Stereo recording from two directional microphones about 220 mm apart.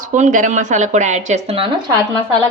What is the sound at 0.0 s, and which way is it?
Speech, 35° right (ahead or behind).